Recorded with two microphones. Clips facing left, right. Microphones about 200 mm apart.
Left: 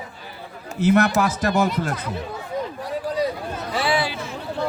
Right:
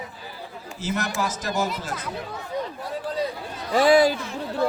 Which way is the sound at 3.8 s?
40° right (ahead or behind).